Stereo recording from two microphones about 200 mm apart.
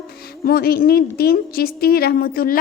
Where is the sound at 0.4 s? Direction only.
50° left (ahead or behind).